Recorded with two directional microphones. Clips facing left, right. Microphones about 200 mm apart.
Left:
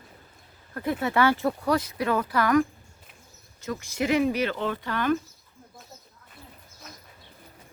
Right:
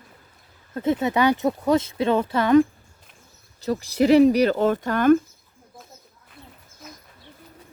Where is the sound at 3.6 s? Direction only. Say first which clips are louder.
Right 8 dB; 35° right (ahead or behind).